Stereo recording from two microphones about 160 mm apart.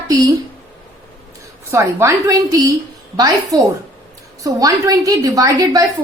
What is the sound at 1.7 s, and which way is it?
A woman's voice, 20° right (ahead or behind).